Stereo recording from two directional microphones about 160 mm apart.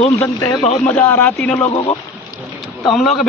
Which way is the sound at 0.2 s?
20° left (ahead or behind).